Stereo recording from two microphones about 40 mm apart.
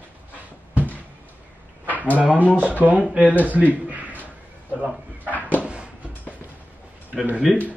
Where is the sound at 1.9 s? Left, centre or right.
Left.